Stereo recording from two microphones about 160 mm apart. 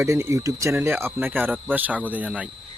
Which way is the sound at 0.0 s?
20° right (ahead or behind).